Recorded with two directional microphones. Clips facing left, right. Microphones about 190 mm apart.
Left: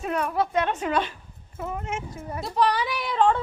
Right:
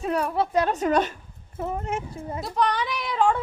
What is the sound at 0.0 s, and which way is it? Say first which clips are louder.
A woman's voice: right 1 dB; 30° right (ahead or behind).